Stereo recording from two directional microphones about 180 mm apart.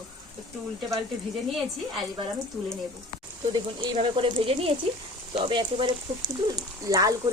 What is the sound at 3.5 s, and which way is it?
Speech, 30° right (ahead or behind).